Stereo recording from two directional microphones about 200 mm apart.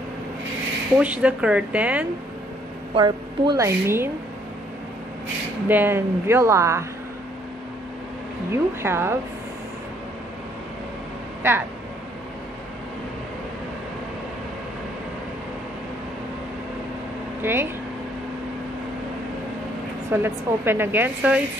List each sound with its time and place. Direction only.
0.9 s a woman's voice: 5° right (ahead or behind)
2.9 s a woman's voice: 20° right (ahead or behind)
5.7 s a woman's voice: 10° right (ahead or behind)
8.5 s a woman's voice: 10° right (ahead or behind)
11.4 s a woman's voice: 10° right (ahead or behind)
17.4 s speech: 10° right (ahead or behind)
20.1 s a woman's voice: 10° right (ahead or behind)